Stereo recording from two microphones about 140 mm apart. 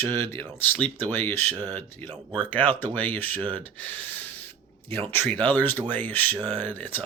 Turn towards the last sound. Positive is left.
turn(degrees=10)  # may be behind; listen again after turning